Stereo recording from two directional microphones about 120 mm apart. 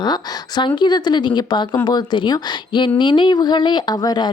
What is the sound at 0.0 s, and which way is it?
Speech, 35° left (ahead or behind).